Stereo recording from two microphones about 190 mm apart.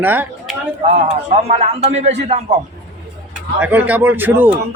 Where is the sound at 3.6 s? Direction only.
10° right (ahead or behind).